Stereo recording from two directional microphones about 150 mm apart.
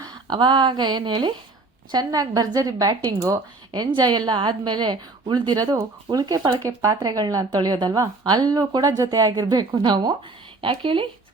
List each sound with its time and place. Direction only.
0.0 s a woman's voice: 30° right (ahead or behind)